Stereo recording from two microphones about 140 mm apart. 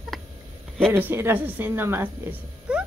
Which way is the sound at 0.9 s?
15° right (ahead or behind).